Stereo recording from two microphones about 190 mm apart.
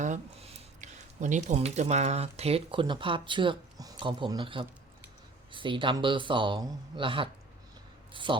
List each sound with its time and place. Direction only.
0.0 s speech: 40° right (ahead or behind)